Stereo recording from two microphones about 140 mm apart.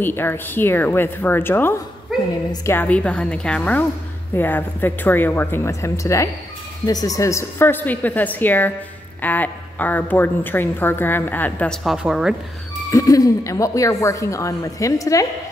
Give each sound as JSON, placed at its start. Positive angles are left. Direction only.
{"t": 0.0, "sound": "a woman's voice", "side_deg": 15}
{"t": 2.1, "sound": "a sound", "side_deg": 0}
{"t": 2.5, "sound": "a woman's voice", "side_deg": 20}
{"t": 12.9, "sound": "a woman's voice", "side_deg": 25}